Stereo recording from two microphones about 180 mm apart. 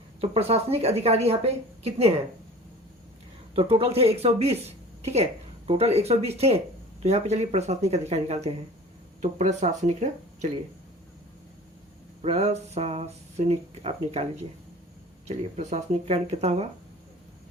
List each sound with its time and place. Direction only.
0.2 s speech: 35° right (ahead or behind)
3.5 s speech: 30° right (ahead or behind)
12.2 s speech: 35° right (ahead or behind)
15.3 s speech: 40° right (ahead or behind)